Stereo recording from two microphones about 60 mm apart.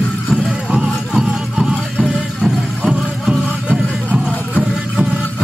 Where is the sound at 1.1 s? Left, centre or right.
Centre.